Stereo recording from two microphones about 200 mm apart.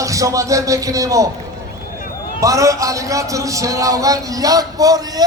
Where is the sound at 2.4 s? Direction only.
15° right (ahead or behind).